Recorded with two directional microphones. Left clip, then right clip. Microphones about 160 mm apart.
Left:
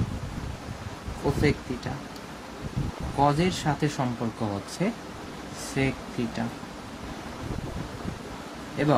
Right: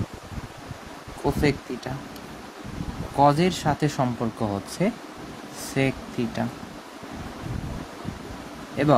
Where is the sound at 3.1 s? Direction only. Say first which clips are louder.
Right 4 dB; 65° right (ahead or behind).